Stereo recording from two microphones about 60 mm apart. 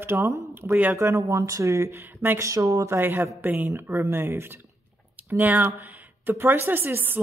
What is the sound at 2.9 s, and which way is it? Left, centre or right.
Speech, right.